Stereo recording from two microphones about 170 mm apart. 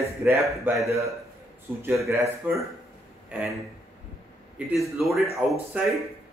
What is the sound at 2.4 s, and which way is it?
A man's voice, 10° right (ahead or behind).